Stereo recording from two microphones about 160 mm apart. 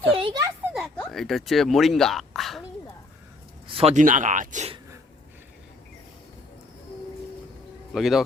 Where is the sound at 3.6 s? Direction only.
35° right (ahead or behind); by 4.6 s 55° right (ahead or behind).